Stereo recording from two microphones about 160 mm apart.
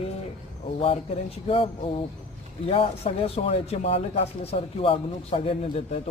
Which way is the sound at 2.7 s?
35° left (ahead or behind).